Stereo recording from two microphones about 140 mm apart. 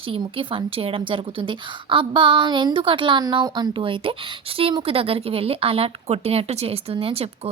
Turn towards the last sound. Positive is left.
turn(degrees=-45)  # may be behind; listen again after turning